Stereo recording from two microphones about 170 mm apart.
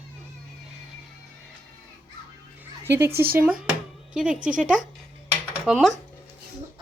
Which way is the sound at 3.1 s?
65° right (ahead or behind).